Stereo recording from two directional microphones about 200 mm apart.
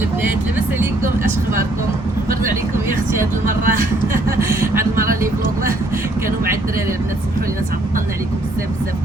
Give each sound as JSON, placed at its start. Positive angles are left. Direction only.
{"t": 3.2, "sound": "speech", "side_deg": -40}
{"t": 4.4, "sound": "speech", "side_deg": -10}
{"t": 6.2, "sound": "speech", "side_deg": -45}